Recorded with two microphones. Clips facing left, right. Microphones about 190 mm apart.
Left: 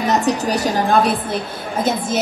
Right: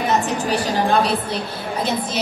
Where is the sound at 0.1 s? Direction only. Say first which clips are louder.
Left 4 dB; 40° left (ahead or behind).